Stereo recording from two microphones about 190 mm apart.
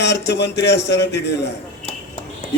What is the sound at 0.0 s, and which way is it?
A man's voice, 65° left (ahead or behind).